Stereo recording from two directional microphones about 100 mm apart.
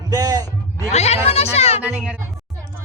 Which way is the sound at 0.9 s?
90° left.